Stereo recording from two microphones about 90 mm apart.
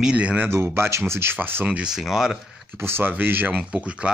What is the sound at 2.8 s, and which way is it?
Speech, 25° right (ahead or behind).